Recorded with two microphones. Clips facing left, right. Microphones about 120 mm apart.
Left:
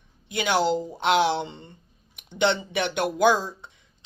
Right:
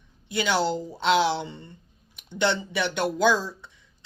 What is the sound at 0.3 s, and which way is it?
A woman's voice, 15° left (ahead or behind).